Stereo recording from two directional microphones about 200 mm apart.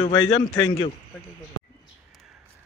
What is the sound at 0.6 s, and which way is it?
Speech, 30° left (ahead or behind).